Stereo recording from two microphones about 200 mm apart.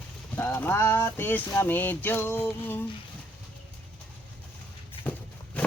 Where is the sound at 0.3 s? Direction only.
10° left (ahead or behind).